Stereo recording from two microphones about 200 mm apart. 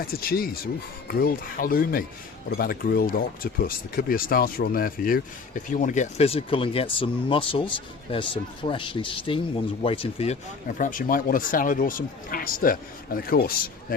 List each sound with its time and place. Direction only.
0.0 s speech: 50° left (ahead or behind); by 10.3 s 30° left (ahead or behind)
10.8 s speech: 40° left (ahead or behind)